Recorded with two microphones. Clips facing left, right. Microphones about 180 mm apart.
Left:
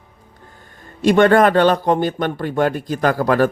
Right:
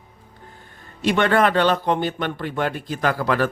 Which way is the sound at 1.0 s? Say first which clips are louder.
Left 6 dB; 45° left (ahead or behind).